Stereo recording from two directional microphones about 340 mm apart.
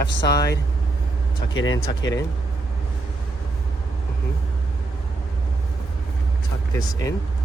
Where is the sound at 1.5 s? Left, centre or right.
Left.